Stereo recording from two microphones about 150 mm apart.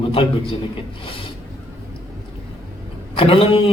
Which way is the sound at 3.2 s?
40° left (ahead or behind).